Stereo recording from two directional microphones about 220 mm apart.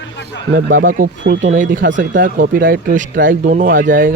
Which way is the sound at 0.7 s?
40° right (ahead or behind).